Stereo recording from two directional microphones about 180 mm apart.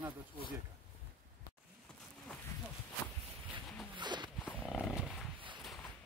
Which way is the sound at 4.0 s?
25° right (ahead or behind).